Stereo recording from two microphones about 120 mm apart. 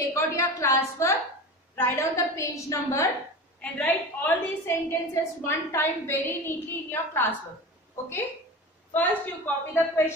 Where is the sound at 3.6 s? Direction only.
10° left (ahead or behind).